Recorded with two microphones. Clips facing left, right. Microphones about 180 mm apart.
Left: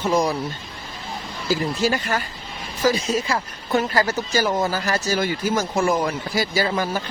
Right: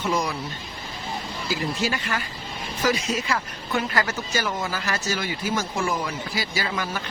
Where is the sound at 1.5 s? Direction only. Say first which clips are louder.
Left 5 dB; 40° left (ahead or behind).